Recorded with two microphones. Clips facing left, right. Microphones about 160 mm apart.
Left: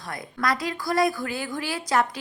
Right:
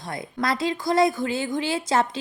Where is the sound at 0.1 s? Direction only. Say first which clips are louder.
Right 1 dB; 25° right (ahead or behind).